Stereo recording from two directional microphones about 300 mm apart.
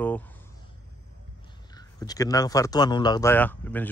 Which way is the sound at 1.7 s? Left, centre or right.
Centre.